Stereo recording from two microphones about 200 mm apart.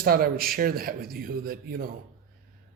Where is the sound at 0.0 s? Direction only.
45° right (ahead or behind).